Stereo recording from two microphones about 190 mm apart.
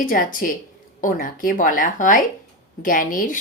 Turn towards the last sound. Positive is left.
turn(degrees=45)  # may be behind; listen again after turning